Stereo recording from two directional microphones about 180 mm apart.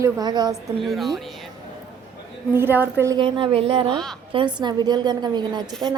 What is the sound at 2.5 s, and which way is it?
Speech, 10° right (ahead or behind).